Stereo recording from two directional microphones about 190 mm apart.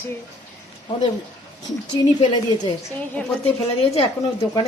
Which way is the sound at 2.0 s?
25° left (ahead or behind).